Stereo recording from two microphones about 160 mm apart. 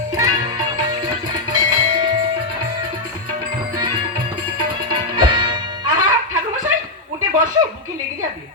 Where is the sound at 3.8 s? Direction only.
30° right (ahead or behind).